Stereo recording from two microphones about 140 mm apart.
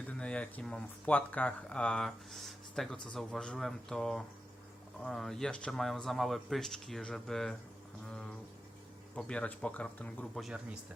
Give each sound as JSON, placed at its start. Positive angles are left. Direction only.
{"t": 0.1, "sound": "speech", "side_deg": 10}
{"t": 9.1, "sound": "speech", "side_deg": 5}